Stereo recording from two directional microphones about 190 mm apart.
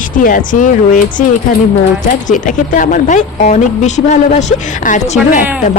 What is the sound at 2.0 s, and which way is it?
Speech, 45° left (ahead or behind).